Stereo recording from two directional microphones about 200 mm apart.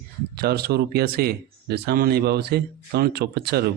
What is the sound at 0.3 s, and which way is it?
Speech, 50° right (ahead or behind).